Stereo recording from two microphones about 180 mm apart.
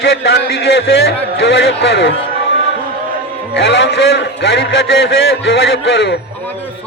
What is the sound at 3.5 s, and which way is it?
A man's voice, 75° left (ahead or behind).